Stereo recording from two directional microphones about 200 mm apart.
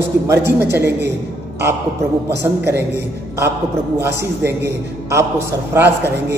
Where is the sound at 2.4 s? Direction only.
10° right (ahead or behind).